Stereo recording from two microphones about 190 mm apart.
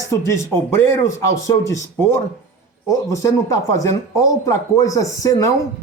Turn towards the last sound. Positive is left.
turn(degrees=15)  # may be behind; listen again after turning